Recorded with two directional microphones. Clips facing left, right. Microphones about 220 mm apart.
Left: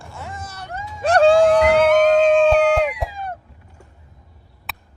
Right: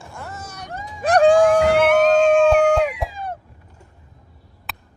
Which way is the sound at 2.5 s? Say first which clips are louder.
Even; centre (ahead or behind).